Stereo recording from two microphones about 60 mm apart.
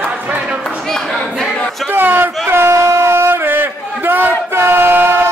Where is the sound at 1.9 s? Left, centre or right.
Right.